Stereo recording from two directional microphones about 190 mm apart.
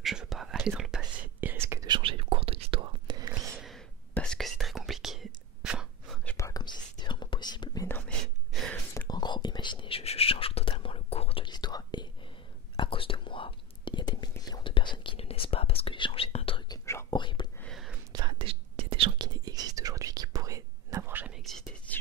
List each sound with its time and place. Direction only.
0.0 s whispering: centre (ahead or behind); by 3.5 s 20° right (ahead or behind)
3.5 s whispering: centre (ahead or behind)
6.2 s whispering: 15° left (ahead or behind)
17.6 s a sound: centre (ahead or behind)
18.1 s whispering: 25° right (ahead or behind); by 21.9 s centre (ahead or behind)